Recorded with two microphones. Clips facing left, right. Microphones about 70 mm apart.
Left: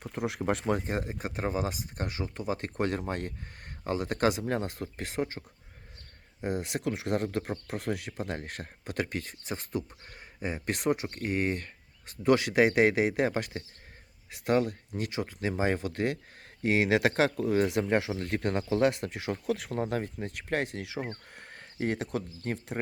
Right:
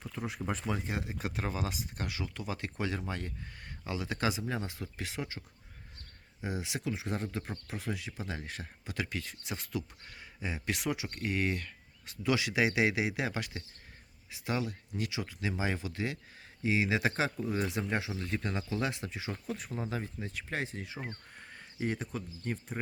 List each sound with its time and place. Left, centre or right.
0.0 s a sound: left
0.3 s speech: left
0.7 s speech: left
6.4 s speech: left
14.3 s speech: left
21.1 s speech: left